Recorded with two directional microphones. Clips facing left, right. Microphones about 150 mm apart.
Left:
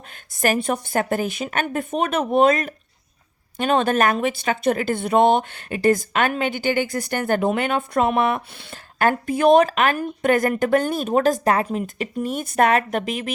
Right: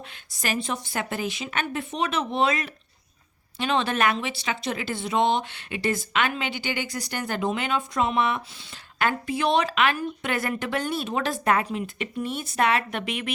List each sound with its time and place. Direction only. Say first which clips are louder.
0.3 s speech: left 8 dB; 50° left (ahead or behind)